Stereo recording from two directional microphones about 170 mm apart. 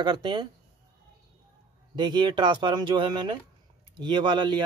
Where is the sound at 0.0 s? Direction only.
25° right (ahead or behind).